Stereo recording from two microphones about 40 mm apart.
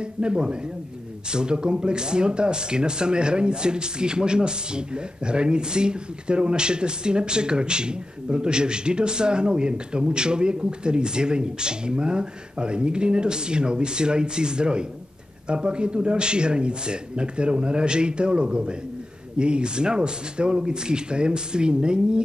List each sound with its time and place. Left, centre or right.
0.2 s speech: right